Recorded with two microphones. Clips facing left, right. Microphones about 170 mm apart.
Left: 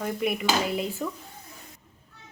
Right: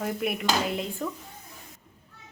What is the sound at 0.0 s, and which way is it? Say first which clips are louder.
Dishes: left 1 dB; centre (ahead or behind).